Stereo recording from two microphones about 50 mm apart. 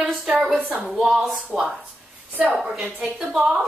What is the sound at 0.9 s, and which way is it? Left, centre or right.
Speech, centre.